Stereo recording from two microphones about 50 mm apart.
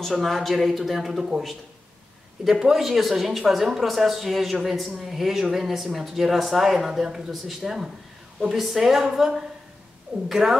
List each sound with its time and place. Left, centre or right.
0.0 s speech: centre